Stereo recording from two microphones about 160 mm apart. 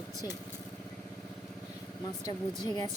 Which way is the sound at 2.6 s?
25° left (ahead or behind).